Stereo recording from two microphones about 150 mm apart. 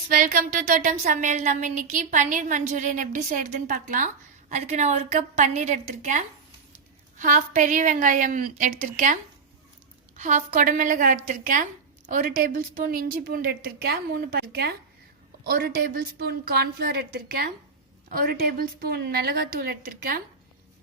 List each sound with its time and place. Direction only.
0.1 s speech: 65° right (ahead or behind)
10.2 s a woman's voice: 60° right (ahead or behind); by 17.5 s 90° right
18.1 s a woman's voice: 75° right (ahead or behind)